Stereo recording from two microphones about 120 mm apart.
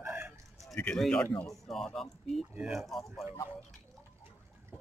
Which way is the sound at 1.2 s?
20° left (ahead or behind).